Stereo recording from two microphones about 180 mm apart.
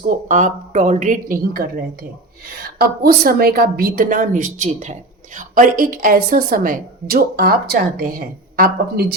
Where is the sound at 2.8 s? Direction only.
55° right (ahead or behind).